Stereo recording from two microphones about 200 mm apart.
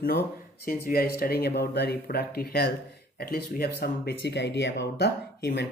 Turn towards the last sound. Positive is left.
turn(degrees=55)  # may be behind; listen again after turning